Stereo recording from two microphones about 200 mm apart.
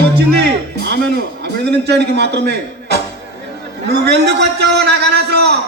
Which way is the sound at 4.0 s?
55° right (ahead or behind).